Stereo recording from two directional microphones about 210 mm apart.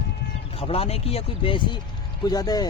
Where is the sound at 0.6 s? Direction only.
30° left (ahead or behind).